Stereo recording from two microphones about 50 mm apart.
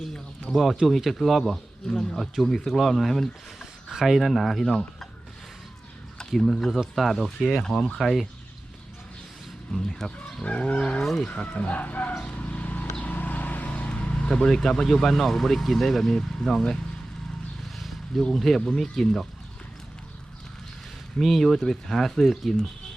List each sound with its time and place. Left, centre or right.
0.5 s speech: centre
3.6 s speech: centre
6.1 s speech: centre
7.9 s speech: centre
9.7 s speech: centre
10.4 s livestock: left
11.0 s speech: centre
11.3 s speech: left
12.2 s vehicle: left; by 14.9 s centre
15.0 s speech: centre
17.7 s a sound: centre
18.2 s speech: centre
21.2 s speech: centre